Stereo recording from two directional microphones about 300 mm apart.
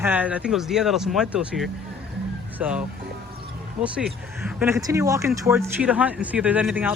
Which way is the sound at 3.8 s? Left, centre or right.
Centre.